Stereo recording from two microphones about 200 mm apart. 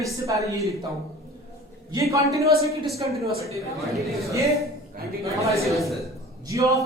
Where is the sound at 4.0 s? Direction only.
Centre (ahead or behind).